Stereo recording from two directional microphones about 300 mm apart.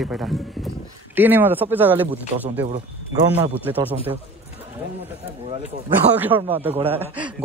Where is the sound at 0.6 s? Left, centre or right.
Centre.